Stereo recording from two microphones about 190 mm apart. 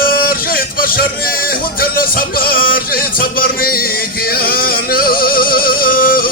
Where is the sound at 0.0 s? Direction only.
50° left (ahead or behind).